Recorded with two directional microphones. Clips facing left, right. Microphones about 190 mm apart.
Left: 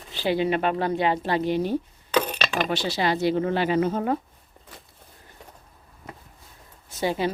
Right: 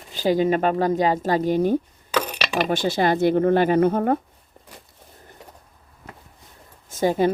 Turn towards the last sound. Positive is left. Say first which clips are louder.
# right 6 dB
turn(degrees=-45)  # may be behind; listen again after turning